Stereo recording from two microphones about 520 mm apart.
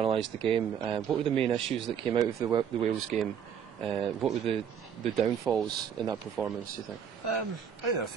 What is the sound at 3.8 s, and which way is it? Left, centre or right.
Speech, centre.